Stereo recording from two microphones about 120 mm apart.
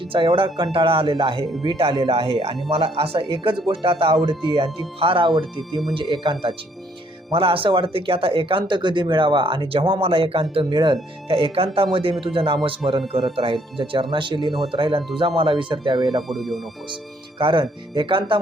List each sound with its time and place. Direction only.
0.1 s speech: 45° right (ahead or behind)
7.3 s speech: 50° right (ahead or behind)
11.3 s speech: 50° right (ahead or behind)
16.3 s speech: centre (ahead or behind)
16.9 s speech: 45° right (ahead or behind)